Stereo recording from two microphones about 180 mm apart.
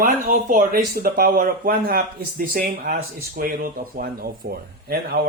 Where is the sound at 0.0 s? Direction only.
45° right (ahead or behind).